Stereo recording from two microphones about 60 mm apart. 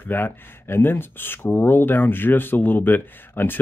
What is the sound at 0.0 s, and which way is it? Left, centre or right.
Speech, left.